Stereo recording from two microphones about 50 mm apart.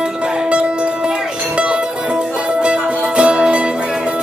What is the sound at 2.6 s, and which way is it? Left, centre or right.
Music, right.